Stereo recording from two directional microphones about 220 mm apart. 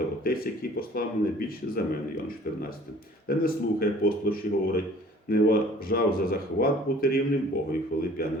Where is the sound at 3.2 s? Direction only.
40° left (ahead or behind).